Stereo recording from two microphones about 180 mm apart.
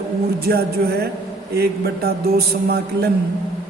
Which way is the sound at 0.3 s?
60° right (ahead or behind).